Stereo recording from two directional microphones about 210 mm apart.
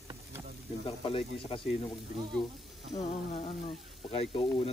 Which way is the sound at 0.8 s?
25° left (ahead or behind).